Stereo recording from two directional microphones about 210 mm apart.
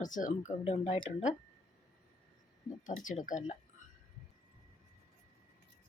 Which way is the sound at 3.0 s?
40° left (ahead or behind).